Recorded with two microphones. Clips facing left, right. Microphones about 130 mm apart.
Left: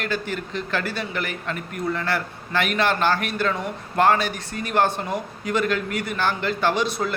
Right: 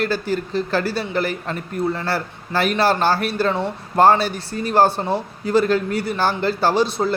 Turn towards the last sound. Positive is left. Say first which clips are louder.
# right 4 dB
turn(degrees=-30)  # may be behind; listen again after turning